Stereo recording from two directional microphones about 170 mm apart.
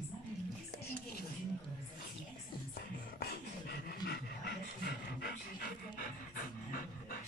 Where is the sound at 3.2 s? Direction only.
65° left (ahead or behind).